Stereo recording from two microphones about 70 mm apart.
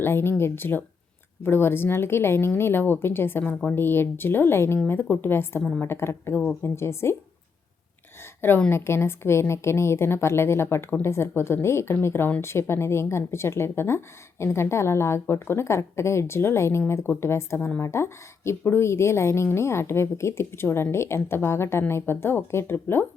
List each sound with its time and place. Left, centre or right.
0.0 s a woman's voice: left
8.2 s a sound: left
8.7 s a woman's voice: left